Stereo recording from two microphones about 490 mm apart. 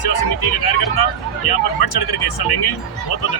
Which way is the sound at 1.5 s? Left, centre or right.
Left.